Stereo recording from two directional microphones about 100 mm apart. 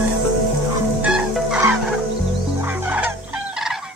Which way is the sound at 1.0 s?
5° right (ahead or behind).